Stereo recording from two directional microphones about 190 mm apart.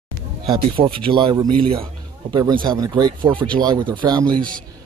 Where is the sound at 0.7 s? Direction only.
25° right (ahead or behind).